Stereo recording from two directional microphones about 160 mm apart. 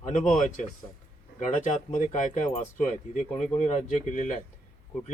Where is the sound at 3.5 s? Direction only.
45° left (ahead or behind).